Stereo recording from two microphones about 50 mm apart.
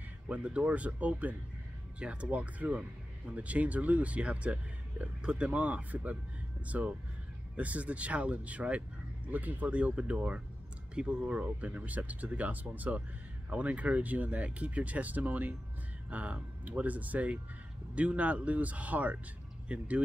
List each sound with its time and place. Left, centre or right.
0.3 s speech: right